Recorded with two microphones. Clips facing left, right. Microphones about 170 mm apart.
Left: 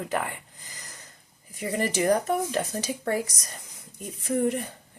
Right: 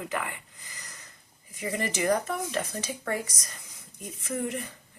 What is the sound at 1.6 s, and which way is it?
Speech, 35° left (ahead or behind).